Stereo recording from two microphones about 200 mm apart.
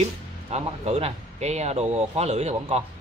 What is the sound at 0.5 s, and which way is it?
Speech, 30° right (ahead or behind).